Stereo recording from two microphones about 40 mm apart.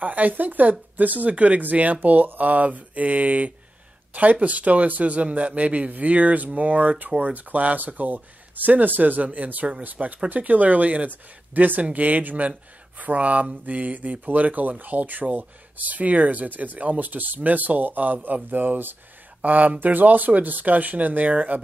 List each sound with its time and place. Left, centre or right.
0.0 s a man's voice: right
19.4 s speech: right